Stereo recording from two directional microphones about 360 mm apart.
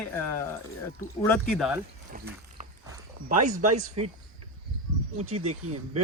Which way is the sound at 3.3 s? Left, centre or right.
Centre.